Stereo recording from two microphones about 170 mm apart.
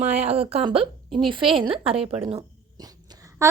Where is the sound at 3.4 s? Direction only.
20° right (ahead or behind).